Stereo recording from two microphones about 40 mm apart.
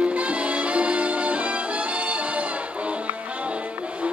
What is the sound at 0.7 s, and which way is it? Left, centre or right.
Music, right.